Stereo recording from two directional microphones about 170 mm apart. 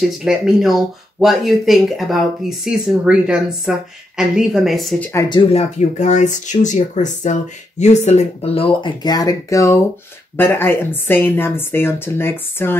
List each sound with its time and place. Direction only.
0.2 s speech: 5° right (ahead or behind)
5.1 s speech: 30° left (ahead or behind); by 12.7 s 15° left (ahead or behind)